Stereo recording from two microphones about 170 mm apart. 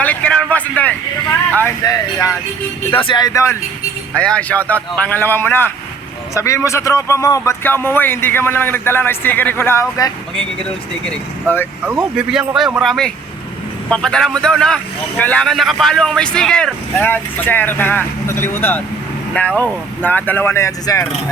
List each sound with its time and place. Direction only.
0.0 s vehicle: 10° left (ahead or behind)
0.5 s a man's voice: 10° left (ahead or behind)
2.9 s speech: 30° left (ahead or behind); by 11.7 s 10° left (ahead or behind)
11.9 s speech: 10° right (ahead or behind); by 21.1 s 20° left (ahead or behind)